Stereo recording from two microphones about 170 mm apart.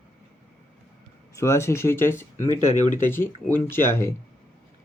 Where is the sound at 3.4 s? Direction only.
15° left (ahead or behind).